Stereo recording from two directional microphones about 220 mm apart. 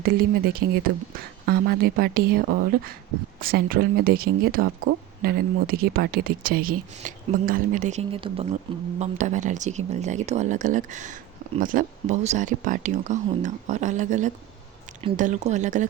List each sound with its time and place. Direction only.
0.0 s a woman's voice: 45° right (ahead or behind)